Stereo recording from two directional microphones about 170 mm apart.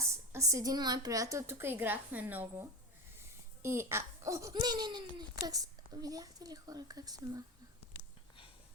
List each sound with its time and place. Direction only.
0.0 s a woman's voice: 15° right (ahead or behind)